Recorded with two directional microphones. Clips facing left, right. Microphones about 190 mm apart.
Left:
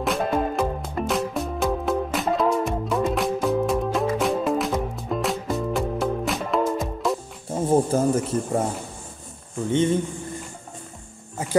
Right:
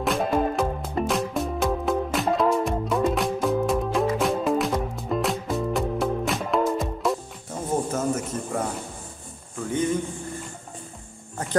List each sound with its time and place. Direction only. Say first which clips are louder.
0.0 s music: even; centre (ahead or behind)
7.4 s a sound: left 6 dB; 30° left (ahead or behind)
9.7 s speech: left 4 dB; 25° left (ahead or behind)